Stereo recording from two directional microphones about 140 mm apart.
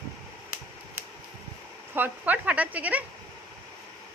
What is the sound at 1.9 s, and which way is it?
Speech, 15° right (ahead or behind).